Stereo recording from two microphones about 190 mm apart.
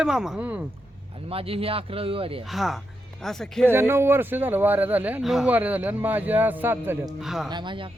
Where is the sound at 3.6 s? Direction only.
10° right (ahead or behind).